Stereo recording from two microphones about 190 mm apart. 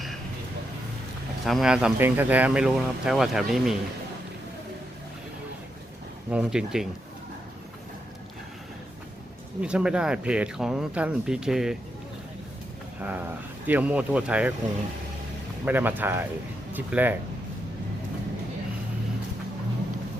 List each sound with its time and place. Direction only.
1.5 s speech: centre (ahead or behind)
6.3 s speech: 5° right (ahead or behind)
9.6 s speech: 5° right (ahead or behind)
13.0 s speech: 10° right (ahead or behind)
15.6 s speech: 10° right (ahead or behind)